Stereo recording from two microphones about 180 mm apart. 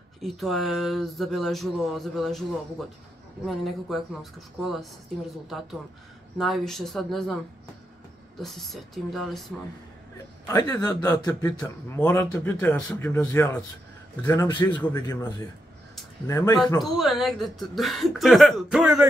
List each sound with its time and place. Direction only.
0.2 s speech: centre (ahead or behind)
3.4 s speech: centre (ahead or behind)
6.3 s speech: centre (ahead or behind)
8.4 s speech: centre (ahead or behind)
10.5 s a man's voice: 20° left (ahead or behind)
16.8 s speech: centre (ahead or behind)